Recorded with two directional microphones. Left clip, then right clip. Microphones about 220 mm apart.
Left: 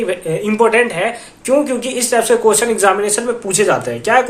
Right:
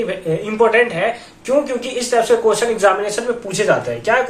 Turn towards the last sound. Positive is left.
turn(degrees=50)  # may be behind; listen again after turning